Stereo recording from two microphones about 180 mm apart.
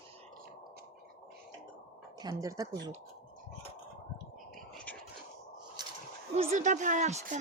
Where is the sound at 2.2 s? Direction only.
20° right (ahead or behind).